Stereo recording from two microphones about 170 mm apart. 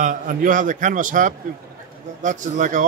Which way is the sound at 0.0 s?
50° right (ahead or behind).